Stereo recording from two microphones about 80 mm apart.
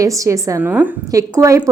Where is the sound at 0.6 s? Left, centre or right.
Right.